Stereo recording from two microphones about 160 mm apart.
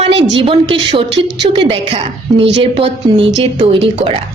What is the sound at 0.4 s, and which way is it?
A woman's voice, 35° right (ahead or behind).